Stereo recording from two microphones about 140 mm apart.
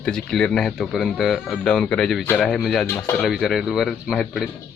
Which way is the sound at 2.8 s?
20° left (ahead or behind).